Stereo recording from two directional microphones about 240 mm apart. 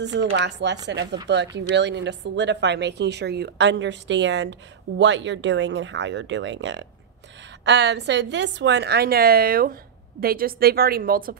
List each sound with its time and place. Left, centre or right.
0.0 s a woman's voice: right